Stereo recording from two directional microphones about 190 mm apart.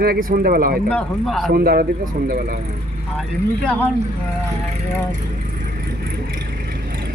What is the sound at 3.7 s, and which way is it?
Speech, 10° left (ahead or behind).